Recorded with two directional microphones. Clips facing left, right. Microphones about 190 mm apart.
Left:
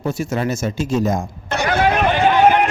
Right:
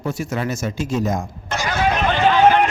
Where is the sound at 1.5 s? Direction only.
60° left (ahead or behind).